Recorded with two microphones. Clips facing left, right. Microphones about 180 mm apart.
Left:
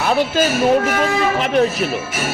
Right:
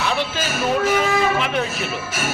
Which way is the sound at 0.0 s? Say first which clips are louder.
Left 7 dB; 45° left (ahead or behind).